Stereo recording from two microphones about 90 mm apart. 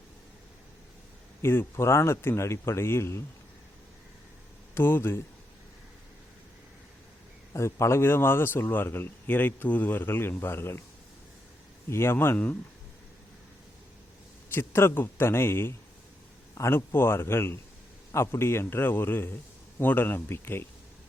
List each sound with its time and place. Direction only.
1.4 s a man's voice: 30° left (ahead or behind)
4.7 s a man's voice: 25° left (ahead or behind)
7.5 s a man's voice: 30° left (ahead or behind)
11.9 s a man's voice: 30° left (ahead or behind)
14.5 s a man's voice: 25° left (ahead or behind)